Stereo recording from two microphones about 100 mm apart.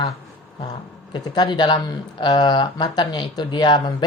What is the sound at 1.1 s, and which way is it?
Speech, 50° left (ahead or behind).